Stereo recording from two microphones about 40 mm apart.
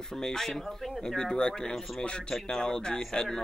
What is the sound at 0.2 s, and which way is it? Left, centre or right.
Speech, centre.